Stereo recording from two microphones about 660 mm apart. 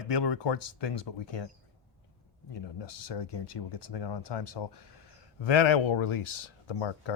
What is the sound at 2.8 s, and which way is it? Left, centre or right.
Speech, left.